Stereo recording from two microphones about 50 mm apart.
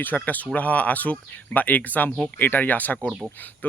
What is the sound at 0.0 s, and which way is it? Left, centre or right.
Speech, left.